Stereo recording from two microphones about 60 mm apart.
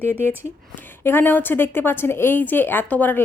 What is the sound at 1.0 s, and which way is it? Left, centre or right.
A woman's voice, left.